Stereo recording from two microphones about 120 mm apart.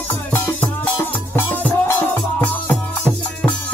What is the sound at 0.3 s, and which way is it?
Music, 15° left (ahead or behind).